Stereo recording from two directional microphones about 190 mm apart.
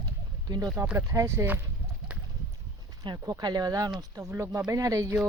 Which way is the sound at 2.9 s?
20° right (ahead or behind).